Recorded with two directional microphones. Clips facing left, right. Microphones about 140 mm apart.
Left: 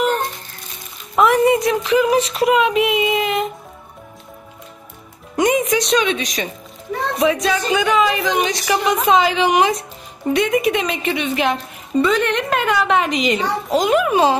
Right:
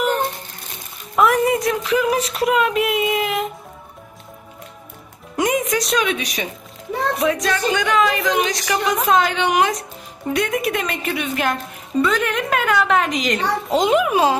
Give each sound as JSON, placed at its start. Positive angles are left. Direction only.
{"t": 1.1, "sound": "speech", "side_deg": 0}
{"t": 5.3, "sound": "speech", "side_deg": 0}
{"t": 7.2, "sound": "speech", "side_deg": 0}
{"t": 13.7, "sound": "a child's voice", "side_deg": -25}
{"t": 14.0, "sound": "speech", "side_deg": -5}